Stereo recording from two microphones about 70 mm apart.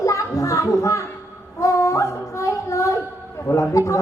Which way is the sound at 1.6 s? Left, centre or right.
Left.